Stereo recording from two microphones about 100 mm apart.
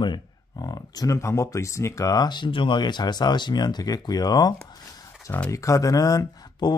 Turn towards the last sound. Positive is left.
turn(degrees=35)  # may be behind; listen again after turning